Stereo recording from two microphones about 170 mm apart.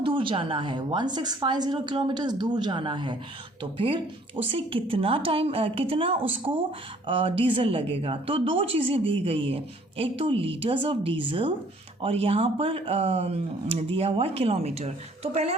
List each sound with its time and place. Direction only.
0.0 s a woman's voice: 30° right (ahead or behind)